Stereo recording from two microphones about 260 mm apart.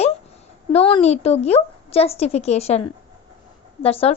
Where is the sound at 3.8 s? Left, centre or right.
Left.